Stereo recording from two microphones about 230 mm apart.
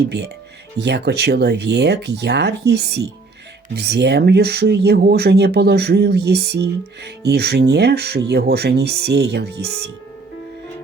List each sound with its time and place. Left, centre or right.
0.0 s speech: right